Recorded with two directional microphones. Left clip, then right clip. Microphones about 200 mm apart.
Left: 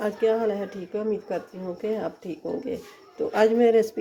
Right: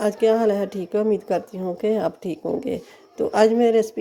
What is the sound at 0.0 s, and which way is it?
Speech, 30° right (ahead or behind).